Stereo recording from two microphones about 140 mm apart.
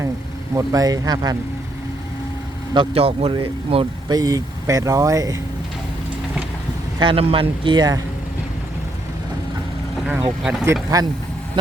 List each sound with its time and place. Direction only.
0.5 s speech: 25° right (ahead or behind)
2.7 s speech: 45° right (ahead or behind)
4.1 s speech: 25° right (ahead or behind)
7.0 s speech: 40° right (ahead or behind)
10.9 s speech: 25° right (ahead or behind)